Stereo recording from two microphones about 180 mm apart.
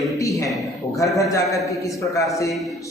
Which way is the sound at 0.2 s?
15° left (ahead or behind).